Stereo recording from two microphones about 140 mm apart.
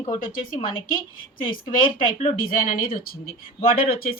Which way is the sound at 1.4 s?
35° left (ahead or behind).